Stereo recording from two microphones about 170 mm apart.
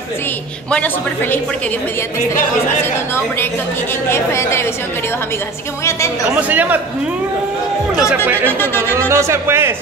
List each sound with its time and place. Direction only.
4.1 s a woman's voice: 15° left (ahead or behind)
6.5 s speech: 10° right (ahead or behind)
8.5 s a woman's voice: 15° left (ahead or behind)
9.1 s speech: 15° right (ahead or behind)